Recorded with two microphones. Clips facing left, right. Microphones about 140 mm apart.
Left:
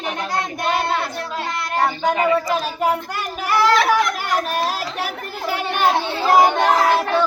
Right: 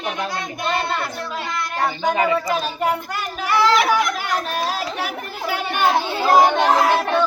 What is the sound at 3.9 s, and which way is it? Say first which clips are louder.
Chatter: left 1 dB; 5° left (ahead or behind).